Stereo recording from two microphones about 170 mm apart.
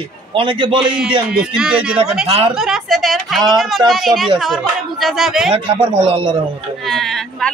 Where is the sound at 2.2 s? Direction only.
35° right (ahead or behind).